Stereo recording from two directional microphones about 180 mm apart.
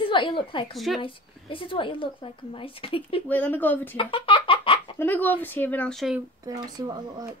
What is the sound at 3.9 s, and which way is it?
Giggle, 30° left (ahead or behind).